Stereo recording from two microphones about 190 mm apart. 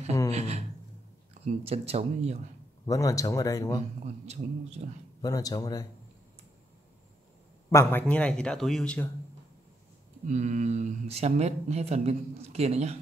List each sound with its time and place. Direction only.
0.3 s a sound: 35° right (ahead or behind)
1.4 s speech: 35° right (ahead or behind)
2.9 s speech: 15° left (ahead or behind)
4.0 s speech: 35° right (ahead or behind)
5.2 s speech: 20° left (ahead or behind)
7.7 s speech: 10° left (ahead or behind)
10.2 s speech: 40° right (ahead or behind)